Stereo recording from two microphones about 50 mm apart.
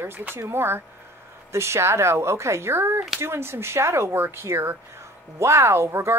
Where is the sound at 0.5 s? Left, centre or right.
Right.